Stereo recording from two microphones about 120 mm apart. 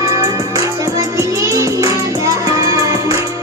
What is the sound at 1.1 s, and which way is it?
Music, 25° right (ahead or behind).